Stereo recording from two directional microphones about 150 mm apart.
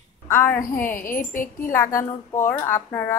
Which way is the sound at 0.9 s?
65° left (ahead or behind).